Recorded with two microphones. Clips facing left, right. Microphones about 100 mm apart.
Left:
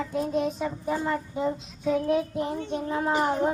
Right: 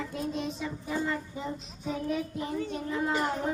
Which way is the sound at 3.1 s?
50° left (ahead or behind).